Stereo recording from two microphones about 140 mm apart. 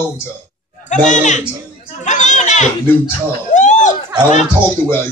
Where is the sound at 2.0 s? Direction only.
60° left (ahead or behind).